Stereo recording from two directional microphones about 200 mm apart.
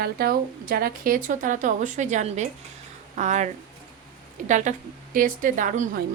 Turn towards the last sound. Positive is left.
turn(degrees=-40)  # may be behind; listen again after turning